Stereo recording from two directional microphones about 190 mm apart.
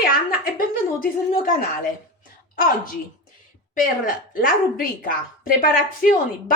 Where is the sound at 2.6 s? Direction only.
50° left (ahead or behind).